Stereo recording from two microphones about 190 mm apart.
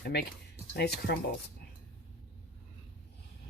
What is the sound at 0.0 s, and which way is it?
A woman's voice, 60° left (ahead or behind).